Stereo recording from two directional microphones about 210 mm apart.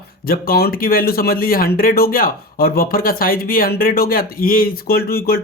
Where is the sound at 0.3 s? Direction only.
45° left (ahead or behind).